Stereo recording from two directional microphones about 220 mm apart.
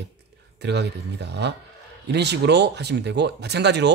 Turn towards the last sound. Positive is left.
turn(degrees=-50)  # may be behind; listen again after turning